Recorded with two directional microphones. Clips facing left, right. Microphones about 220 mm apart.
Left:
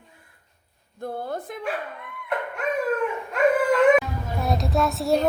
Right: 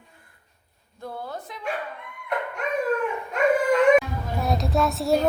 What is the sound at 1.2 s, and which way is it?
Speech, 50° left (ahead or behind).